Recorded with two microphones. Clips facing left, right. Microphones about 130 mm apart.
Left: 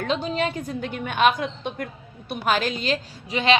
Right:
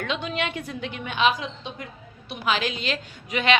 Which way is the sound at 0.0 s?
35° left (ahead or behind).